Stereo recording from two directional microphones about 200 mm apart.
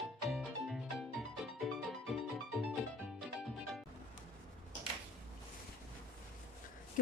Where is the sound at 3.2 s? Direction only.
Centre (ahead or behind).